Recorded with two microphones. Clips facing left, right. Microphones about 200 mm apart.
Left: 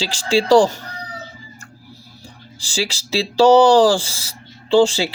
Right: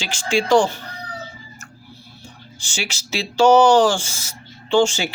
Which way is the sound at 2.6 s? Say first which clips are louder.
Left 6 dB; 35° left (ahead or behind).